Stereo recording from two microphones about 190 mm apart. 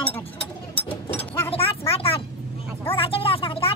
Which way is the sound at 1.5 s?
30° left (ahead or behind).